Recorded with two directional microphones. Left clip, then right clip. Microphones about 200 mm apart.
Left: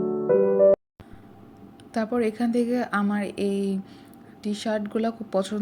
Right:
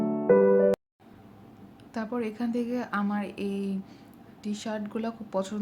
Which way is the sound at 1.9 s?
15° left (ahead or behind).